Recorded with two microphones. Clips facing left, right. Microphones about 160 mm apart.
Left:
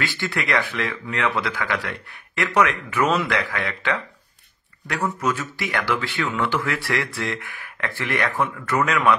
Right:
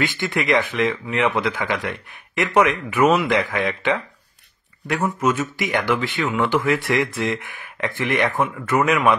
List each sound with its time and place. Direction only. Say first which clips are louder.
0.0 s speech: right 4 dB; 20° right (ahead or behind)